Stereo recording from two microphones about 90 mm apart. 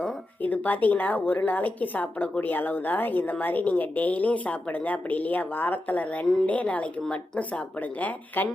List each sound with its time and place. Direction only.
0.4 s a woman's voice: 20° left (ahead or behind)